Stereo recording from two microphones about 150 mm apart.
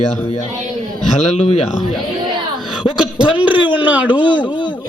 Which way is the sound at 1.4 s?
40° left (ahead or behind).